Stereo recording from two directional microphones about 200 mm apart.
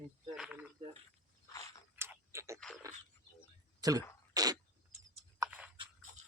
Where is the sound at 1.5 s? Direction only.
15° left (ahead or behind).